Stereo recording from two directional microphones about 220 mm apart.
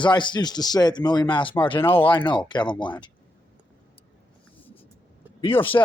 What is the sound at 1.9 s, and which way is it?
A man's voice, 25° left (ahead or behind).